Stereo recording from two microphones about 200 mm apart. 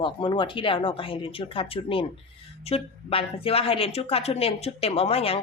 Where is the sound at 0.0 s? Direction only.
25° left (ahead or behind).